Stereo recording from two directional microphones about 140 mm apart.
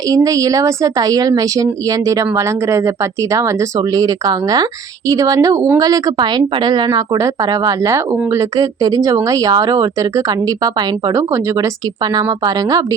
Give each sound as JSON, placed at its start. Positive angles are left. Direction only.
{"t": 0.1, "sound": "speech", "side_deg": -25}